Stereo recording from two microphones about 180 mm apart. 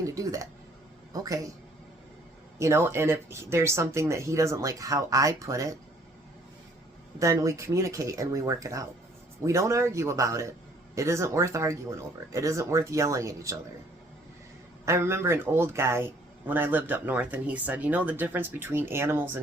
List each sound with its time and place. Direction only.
0.0 s a sound: 20° right (ahead or behind)
1.1 s speech: 20° right (ahead or behind)
2.6 s speech: 15° right (ahead or behind)
7.2 s speech: 15° right (ahead or behind)
14.8 s speech: 15° right (ahead or behind)